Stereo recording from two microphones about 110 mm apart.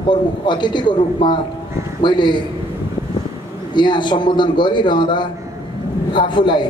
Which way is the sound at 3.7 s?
45° left (ahead or behind).